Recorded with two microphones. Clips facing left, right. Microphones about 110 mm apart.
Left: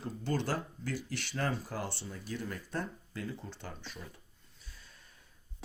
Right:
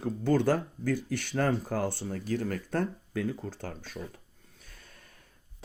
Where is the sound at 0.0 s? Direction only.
50° right (ahead or behind).